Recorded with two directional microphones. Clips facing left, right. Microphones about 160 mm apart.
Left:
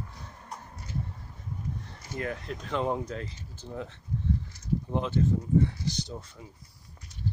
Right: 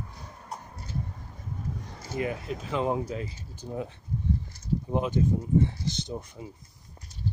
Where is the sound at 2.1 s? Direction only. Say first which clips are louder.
Right 3 dB; 10° right (ahead or behind).